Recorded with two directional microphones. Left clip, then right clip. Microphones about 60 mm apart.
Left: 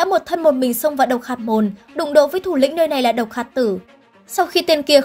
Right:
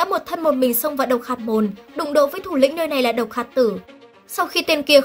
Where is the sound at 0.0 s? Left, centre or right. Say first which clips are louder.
Left 4 dB; left.